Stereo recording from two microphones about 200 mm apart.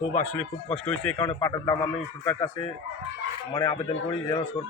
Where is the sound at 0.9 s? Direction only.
5° left (ahead or behind).